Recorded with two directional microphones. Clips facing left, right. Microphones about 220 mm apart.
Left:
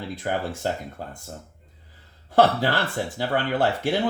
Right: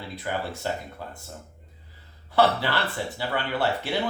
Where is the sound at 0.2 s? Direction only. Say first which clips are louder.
Left 3 dB; 50° left (ahead or behind).